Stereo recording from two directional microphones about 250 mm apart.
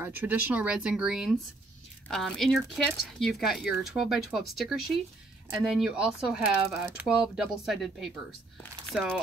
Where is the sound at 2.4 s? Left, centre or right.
Centre.